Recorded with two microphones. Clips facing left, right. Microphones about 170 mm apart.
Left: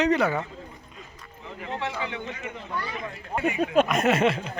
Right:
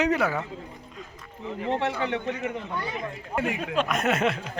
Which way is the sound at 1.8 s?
60° right (ahead or behind).